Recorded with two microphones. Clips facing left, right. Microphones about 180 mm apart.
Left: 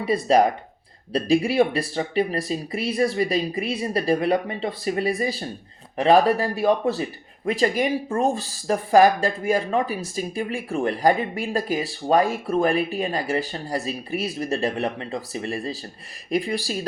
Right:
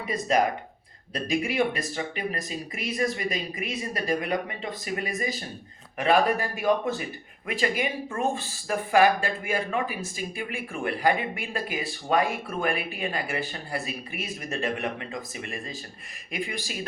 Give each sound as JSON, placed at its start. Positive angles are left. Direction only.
{"t": 0.0, "sound": "speech", "side_deg": 30}